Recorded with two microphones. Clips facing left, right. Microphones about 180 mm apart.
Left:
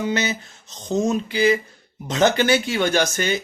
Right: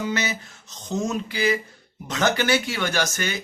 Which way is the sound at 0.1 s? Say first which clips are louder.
Left 3 dB; 25° left (ahead or behind).